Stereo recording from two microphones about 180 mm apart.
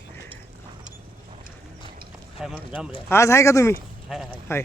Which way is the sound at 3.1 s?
15° left (ahead or behind).